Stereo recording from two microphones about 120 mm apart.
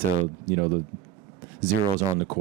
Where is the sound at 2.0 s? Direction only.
20° right (ahead or behind).